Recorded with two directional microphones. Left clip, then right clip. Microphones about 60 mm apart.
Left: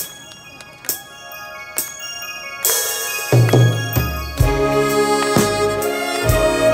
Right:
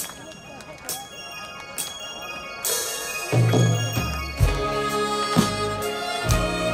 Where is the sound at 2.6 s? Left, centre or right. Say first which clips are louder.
Left 7 dB; left.